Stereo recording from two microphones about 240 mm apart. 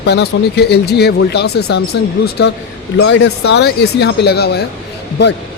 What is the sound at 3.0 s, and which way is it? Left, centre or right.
Speech, left.